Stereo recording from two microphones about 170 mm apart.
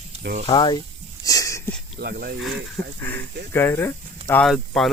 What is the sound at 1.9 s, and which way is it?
Speech, 65° right (ahead or behind).